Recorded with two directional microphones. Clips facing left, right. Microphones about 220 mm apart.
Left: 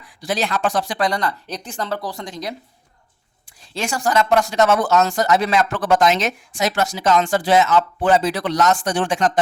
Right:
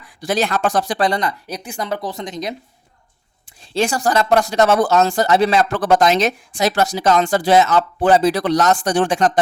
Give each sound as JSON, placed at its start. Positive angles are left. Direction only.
{"t": 0.2, "sound": "speech", "side_deg": -50}
{"t": 1.2, "sound": "speech", "side_deg": -10}
{"t": 3.6, "sound": "speech", "side_deg": -35}